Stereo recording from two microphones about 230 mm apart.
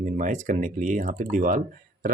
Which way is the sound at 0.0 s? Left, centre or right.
Right.